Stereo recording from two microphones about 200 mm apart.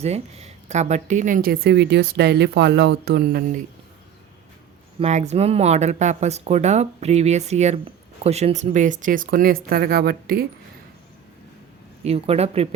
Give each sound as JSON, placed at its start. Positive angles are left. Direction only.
{"t": 0.0, "sound": "a woman's voice", "side_deg": -30}
{"t": 4.9, "sound": "a woman's voice", "side_deg": -35}
{"t": 12.0, "sound": "speech", "side_deg": -30}